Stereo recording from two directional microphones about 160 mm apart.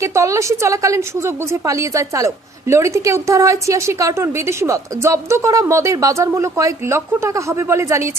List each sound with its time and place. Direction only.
0.0 s a woman's voice: 20° right (ahead or behind)